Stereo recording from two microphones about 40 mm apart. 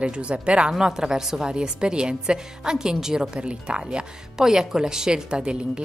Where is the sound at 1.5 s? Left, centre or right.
Right.